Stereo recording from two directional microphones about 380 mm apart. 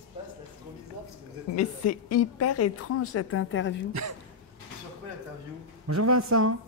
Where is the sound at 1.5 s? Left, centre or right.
Left.